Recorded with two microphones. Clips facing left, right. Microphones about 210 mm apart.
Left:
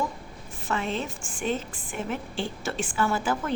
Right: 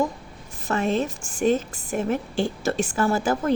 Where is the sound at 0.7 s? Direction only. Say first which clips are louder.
Right 6 dB; 45° right (ahead or behind).